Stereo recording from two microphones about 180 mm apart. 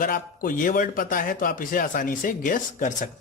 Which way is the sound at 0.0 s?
50° left (ahead or behind).